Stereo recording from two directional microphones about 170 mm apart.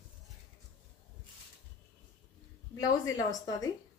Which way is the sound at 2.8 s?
20° left (ahead or behind).